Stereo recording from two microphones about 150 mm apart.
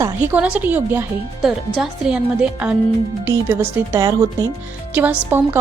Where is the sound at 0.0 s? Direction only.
15° right (ahead or behind).